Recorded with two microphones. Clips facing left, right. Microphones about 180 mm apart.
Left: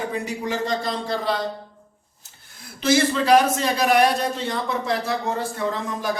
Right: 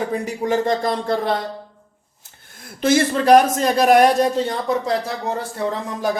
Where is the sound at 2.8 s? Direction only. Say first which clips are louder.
Right 3 dB; 50° right (ahead or behind).